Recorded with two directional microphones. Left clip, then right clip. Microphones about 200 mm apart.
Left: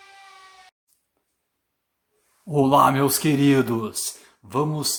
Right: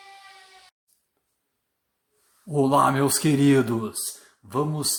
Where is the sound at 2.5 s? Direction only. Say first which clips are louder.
Left 3 dB; 5° left (ahead or behind).